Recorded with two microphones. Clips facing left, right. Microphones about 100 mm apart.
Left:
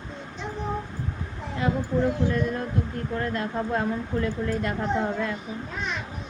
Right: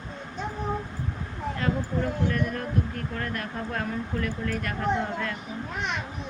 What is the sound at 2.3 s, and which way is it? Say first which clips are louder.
Speech: left 2 dB; 20° left (ahead or behind).